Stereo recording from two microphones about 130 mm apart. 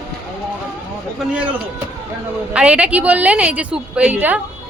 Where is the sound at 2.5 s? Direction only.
10° right (ahead or behind).